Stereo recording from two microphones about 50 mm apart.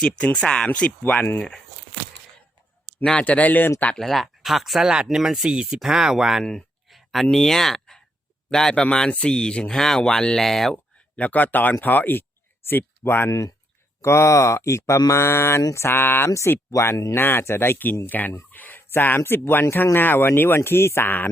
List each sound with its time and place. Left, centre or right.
0.3 s speech: centre
3.0 s speech: left
3.9 s speech: centre
4.8 s speech: centre
6.4 s speech: centre
6.9 s a sound: centre
7.3 s speech: centre
11.2 s speech: left
12.6 s speech: left
14.0 s speech: left
16.7 s speech: left
17.2 s speech: left
18.5 s a sound: left
18.9 s speech: left